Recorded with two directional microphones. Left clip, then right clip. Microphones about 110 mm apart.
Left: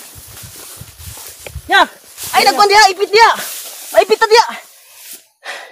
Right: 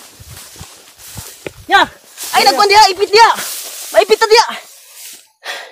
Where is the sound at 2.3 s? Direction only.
15° right (ahead or behind).